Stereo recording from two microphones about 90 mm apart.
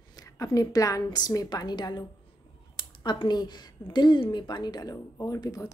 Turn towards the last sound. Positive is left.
turn(degrees=40)  # may be behind; listen again after turning